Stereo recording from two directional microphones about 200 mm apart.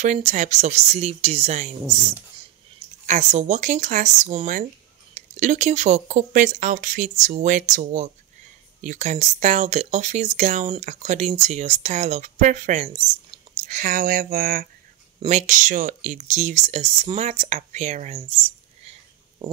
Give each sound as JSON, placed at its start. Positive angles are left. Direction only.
{"t": 0.0, "sound": "speech", "side_deg": -35}